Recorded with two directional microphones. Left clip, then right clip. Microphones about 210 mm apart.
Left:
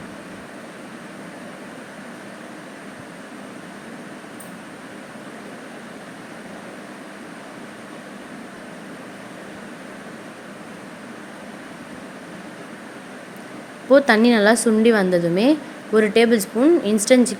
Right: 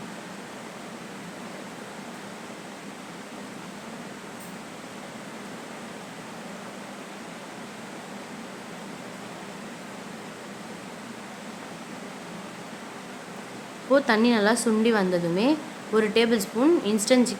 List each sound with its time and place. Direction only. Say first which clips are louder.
13.9 s a woman's voice: left 7 dB; 20° left (ahead or behind)